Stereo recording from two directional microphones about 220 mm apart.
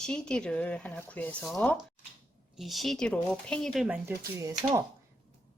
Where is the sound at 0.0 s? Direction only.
5° left (ahead or behind).